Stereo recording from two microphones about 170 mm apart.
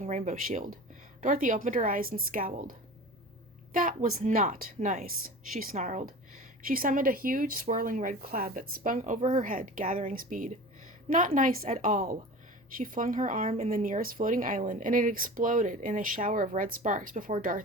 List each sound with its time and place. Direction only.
0.0 s speech: 45° right (ahead or behind)